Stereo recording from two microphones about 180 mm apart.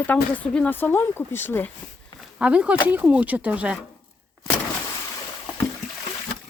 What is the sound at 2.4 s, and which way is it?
Speech, 5° right (ahead or behind).